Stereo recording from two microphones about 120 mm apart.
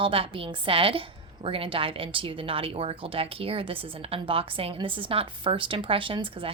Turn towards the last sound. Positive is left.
turn(degrees=-45)  # may be behind; listen again after turning